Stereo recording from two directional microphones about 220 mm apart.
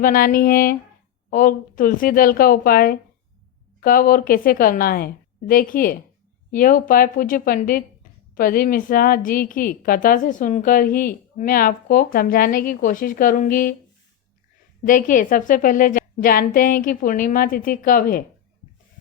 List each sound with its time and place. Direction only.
0.0 s a woman's voice: 40° left (ahead or behind)
14.8 s a woman's voice: 35° left (ahead or behind)